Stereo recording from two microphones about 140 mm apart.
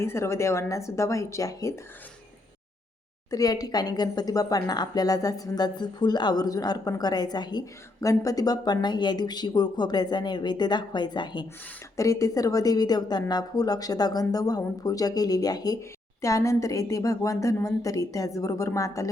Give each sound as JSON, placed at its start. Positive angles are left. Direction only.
{"t": 0.0, "sound": "a woman's voice", "side_deg": 20}
{"t": 3.2, "sound": "a woman's voice", "side_deg": 25}